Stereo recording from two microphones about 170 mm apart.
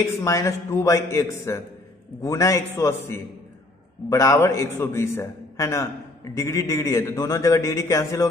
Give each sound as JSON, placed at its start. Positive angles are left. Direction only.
{"t": 0.0, "sound": "a man's voice", "side_deg": 15}